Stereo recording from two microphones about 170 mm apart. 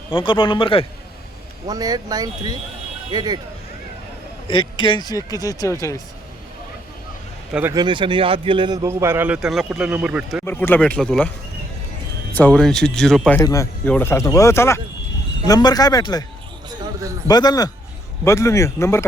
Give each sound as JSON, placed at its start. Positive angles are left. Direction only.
{"t": 0.1, "sound": "speech", "side_deg": 30}
{"t": 1.6, "sound": "speech", "side_deg": -20}
{"t": 4.4, "sound": "speech", "side_deg": 30}
{"t": 7.7, "sound": "a man's voice", "side_deg": -25}
{"t": 10.4, "sound": "a man's voice", "side_deg": 10}
{"t": 12.3, "sound": "speech", "side_deg": 10}
{"t": 13.4, "sound": "a man's voice", "side_deg": 20}
{"t": 17.2, "sound": "a man's voice", "side_deg": 20}